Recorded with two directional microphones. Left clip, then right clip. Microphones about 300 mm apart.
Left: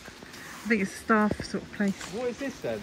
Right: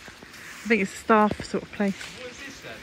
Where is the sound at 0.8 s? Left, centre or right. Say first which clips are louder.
Right 6 dB; centre.